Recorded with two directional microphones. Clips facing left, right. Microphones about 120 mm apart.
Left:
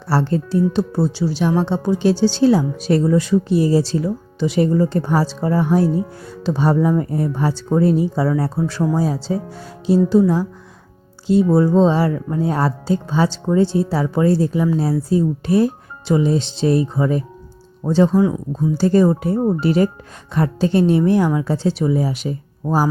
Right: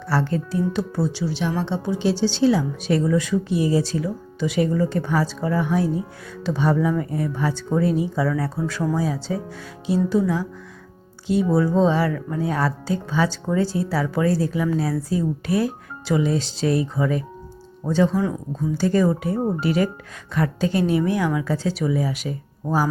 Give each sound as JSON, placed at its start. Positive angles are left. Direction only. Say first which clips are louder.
{"t": 0.1, "sound": "speech", "louder": "left 5 dB", "side_deg": 35}